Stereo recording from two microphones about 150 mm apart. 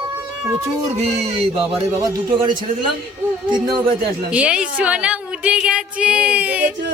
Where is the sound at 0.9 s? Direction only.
45° right (ahead or behind).